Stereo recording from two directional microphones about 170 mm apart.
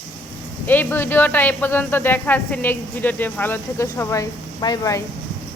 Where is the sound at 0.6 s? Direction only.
10° left (ahead or behind).